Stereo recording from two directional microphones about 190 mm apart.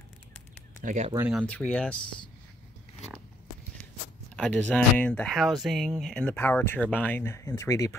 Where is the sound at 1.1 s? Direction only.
10° right (ahead or behind).